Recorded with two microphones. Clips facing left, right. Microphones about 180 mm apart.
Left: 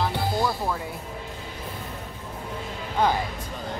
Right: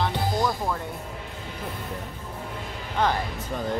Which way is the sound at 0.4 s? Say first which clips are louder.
Even; 5° left (ahead or behind).